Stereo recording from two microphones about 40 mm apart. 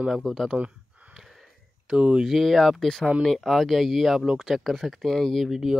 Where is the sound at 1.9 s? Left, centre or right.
Right.